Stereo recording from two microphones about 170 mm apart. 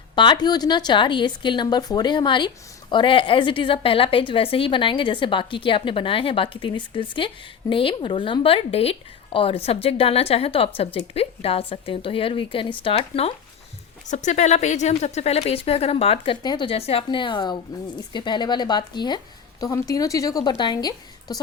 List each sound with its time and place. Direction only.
0.2 s a woman's voice: 25° left (ahead or behind)